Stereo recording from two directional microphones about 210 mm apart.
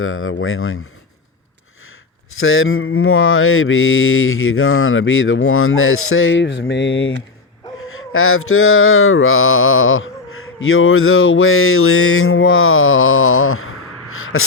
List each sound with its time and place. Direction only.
0.0 s mantra: 75° left (ahead or behind)
2.4 s mantra: 75° left (ahead or behind)
7.9 s mantra: 80° left